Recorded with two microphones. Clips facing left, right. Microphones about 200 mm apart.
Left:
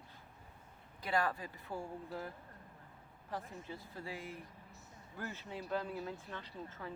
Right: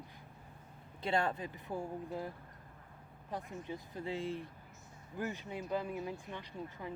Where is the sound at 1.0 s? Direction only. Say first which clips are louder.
Right 2 dB; 25° right (ahead or behind).